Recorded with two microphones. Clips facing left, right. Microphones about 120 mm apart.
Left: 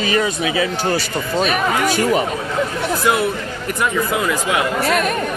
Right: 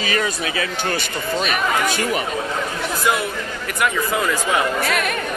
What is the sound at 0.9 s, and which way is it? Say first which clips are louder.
Speech: left 3 dB; 40° left (ahead or behind).